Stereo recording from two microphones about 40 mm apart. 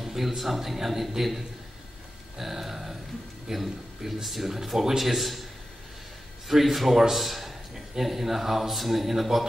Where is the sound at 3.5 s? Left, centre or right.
Centre.